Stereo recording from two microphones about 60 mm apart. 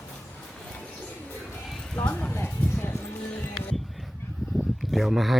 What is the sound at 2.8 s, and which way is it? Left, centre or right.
Music, left.